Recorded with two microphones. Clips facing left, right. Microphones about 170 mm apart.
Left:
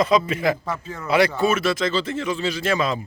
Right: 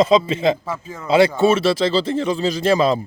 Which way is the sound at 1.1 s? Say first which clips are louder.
Right 5 dB; 25° right (ahead or behind).